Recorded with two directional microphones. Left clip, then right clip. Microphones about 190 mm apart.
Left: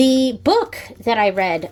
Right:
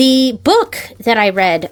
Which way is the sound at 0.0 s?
25° right (ahead or behind).